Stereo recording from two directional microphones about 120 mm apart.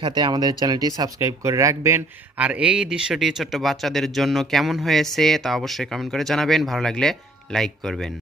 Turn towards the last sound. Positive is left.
turn(degrees=5)  # may be behind; listen again after turning